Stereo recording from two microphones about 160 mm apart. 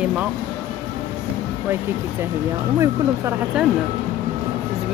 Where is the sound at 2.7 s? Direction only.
20° right (ahead or behind).